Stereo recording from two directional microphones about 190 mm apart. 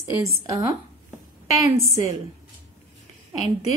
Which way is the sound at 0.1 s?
15° right (ahead or behind).